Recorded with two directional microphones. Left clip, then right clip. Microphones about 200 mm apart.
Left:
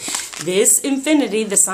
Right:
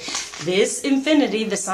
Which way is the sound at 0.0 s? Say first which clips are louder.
Left 2 dB; 40° left (ahead or behind).